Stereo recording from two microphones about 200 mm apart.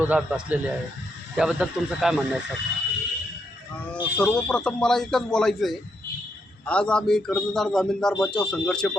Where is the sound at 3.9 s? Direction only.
5° left (ahead or behind).